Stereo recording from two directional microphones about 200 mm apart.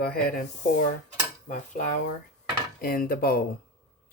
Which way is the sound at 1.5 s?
40° left (ahead or behind).